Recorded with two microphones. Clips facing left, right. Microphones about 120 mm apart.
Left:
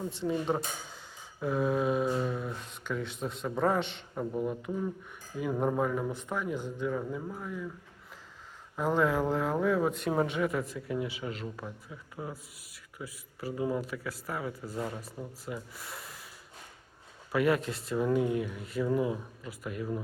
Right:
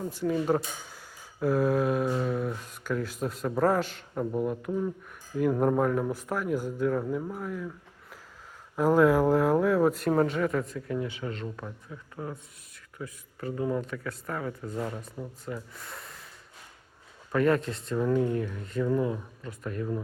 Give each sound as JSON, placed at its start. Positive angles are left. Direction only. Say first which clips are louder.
{"t": 0.1, "sound": "speech", "louder": "right 5 dB", "side_deg": 25}
{"t": 0.3, "sound": "speech", "louder": "right 4 dB", "side_deg": -5}
{"t": 7.2, "sound": "speech", "louder": "right 4 dB", "side_deg": -10}
{"t": 7.4, "sound": "speech", "louder": "right 3 dB", "side_deg": 0}
{"t": 8.7, "sound": "speech", "louder": "right 6 dB", "side_deg": -5}
{"t": 17.3, "sound": "speech", "louder": "right 3 dB", "side_deg": 5}